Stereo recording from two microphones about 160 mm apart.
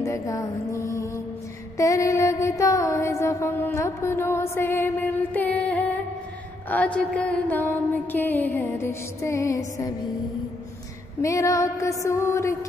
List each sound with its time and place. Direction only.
0.0 s music: 20° left (ahead or behind)
1.8 s mantra: 20° left (ahead or behind)
11.2 s a sound: 20° left (ahead or behind)